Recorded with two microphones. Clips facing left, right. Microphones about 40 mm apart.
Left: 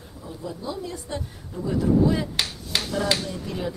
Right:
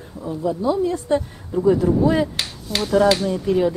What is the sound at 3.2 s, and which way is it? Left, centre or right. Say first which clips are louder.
Speech: right 12 dB; right.